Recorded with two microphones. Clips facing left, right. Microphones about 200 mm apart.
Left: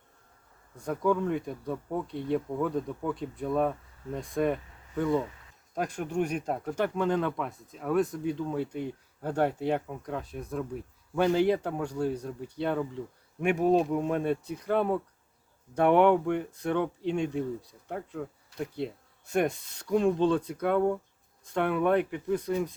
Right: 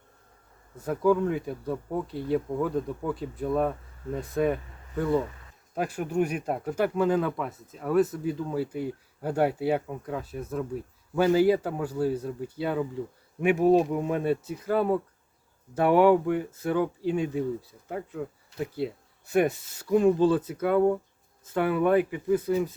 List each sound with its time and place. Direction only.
0.8 s speech: 5° right (ahead or behind)